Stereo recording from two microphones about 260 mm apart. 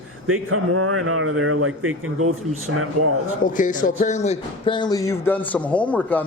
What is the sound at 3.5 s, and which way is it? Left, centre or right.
Speech, left.